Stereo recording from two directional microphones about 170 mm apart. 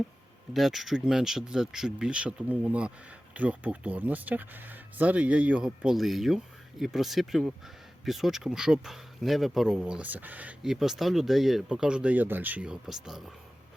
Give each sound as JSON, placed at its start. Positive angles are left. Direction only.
{"t": 0.5, "sound": "speech", "side_deg": 0}